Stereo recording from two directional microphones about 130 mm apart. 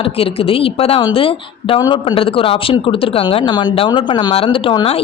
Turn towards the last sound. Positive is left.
turn(degrees=40)  # may be behind; listen again after turning